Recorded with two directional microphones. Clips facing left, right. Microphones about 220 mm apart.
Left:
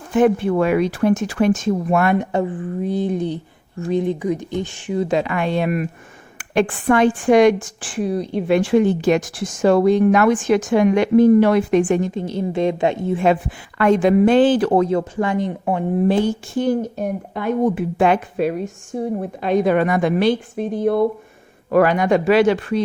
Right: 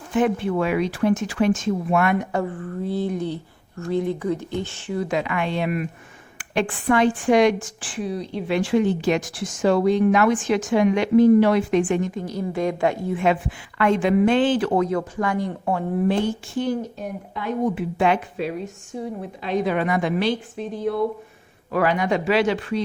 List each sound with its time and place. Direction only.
0.1 s a woman's voice: 50° left (ahead or behind)
2.0 s speech: 25° left (ahead or behind)
5.0 s a woman's voice: 35° left (ahead or behind)
13.2 s speech: 40° left (ahead or behind); by 16.0 s 20° left (ahead or behind)
16.0 s a woman's voice: 40° left (ahead or behind)